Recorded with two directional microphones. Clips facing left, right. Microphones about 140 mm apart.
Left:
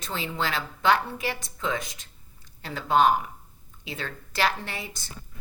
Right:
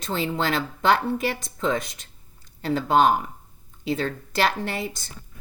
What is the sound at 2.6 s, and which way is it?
A woman's voice, 35° right (ahead or behind).